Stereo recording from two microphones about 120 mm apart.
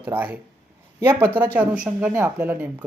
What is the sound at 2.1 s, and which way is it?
Speech, 20° right (ahead or behind).